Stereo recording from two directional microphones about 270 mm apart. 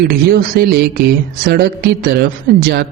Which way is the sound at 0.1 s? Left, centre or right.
Right.